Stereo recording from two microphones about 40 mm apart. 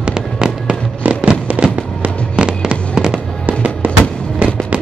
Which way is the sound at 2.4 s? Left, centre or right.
Right.